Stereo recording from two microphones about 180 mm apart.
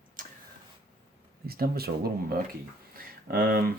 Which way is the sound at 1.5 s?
55° right (ahead or behind).